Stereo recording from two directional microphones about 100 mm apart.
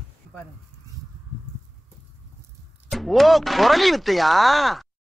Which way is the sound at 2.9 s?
Centre (ahead or behind).